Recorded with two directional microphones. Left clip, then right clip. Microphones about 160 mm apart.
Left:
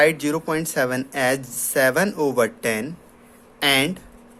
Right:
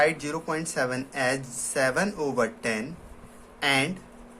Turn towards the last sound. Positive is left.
turn(degrees=55)  # may be behind; listen again after turning